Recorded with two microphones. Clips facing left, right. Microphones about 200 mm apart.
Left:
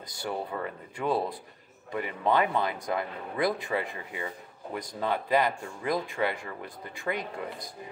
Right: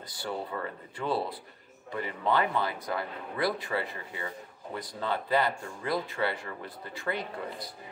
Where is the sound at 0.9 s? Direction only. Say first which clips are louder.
Left 2 dB; 15° left (ahead or behind).